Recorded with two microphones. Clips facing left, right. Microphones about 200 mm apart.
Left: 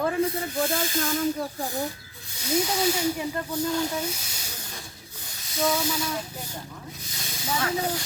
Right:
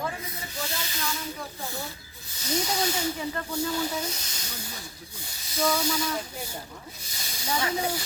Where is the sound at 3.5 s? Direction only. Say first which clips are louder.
Left 3 dB; 10° right (ahead or behind).